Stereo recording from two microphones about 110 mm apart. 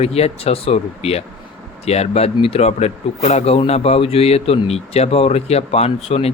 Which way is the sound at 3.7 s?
65° left (ahead or behind).